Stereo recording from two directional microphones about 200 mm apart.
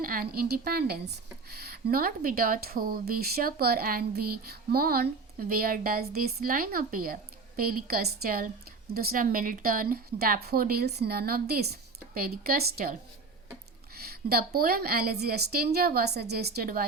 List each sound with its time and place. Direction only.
0.0 s speech: 45° right (ahead or behind)